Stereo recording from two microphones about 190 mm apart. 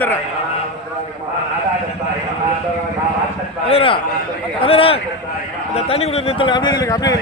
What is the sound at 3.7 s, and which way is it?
Speech, 30° left (ahead or behind).